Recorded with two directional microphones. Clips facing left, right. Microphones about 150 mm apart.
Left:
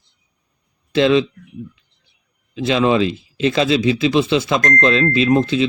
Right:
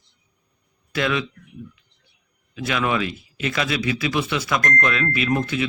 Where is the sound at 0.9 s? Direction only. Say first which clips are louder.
Left 9 dB; 25° left (ahead or behind).